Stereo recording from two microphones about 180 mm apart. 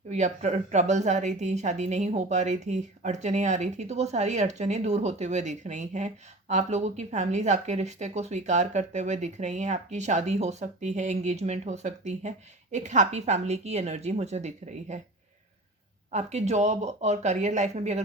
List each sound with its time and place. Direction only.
0.1 s speech: 40° right (ahead or behind)
16.1 s speech: 40° right (ahead or behind)